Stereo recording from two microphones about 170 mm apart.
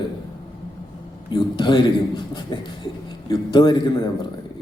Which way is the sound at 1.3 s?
25° left (ahead or behind).